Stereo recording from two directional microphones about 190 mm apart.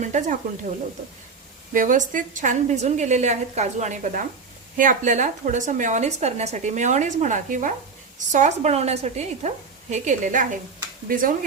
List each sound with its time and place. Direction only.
0.0 s a woman's voice: 40° right (ahead or behind)
1.7 s a woman's voice: 45° right (ahead or behind)